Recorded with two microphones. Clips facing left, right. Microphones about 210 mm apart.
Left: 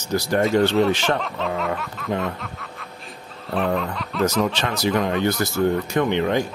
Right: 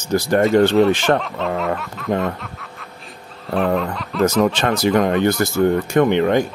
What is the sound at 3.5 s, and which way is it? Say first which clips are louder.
Music: right 4 dB; centre (ahead or behind).